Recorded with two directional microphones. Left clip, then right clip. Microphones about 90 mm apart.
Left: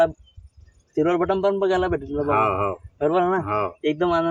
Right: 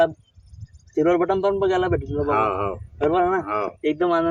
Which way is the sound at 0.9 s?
15° right (ahead or behind).